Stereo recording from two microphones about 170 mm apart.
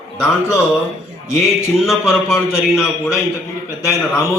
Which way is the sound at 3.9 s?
20° left (ahead or behind).